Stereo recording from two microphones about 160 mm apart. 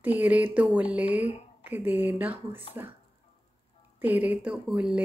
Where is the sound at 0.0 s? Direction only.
10° right (ahead or behind).